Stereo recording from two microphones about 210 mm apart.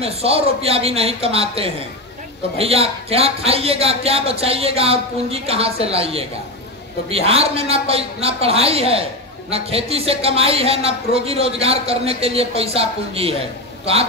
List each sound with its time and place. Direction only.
0.0 s a man's voice: 30° right (ahead or behind)